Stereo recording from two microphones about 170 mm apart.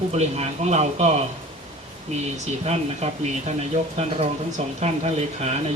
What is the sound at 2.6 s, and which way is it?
Speech, 40° right (ahead or behind).